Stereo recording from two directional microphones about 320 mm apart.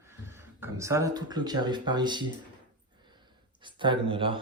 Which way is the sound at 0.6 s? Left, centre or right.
Centre.